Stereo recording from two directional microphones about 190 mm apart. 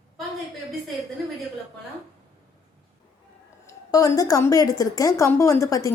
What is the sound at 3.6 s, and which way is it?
A woman's voice, 15° left (ahead or behind).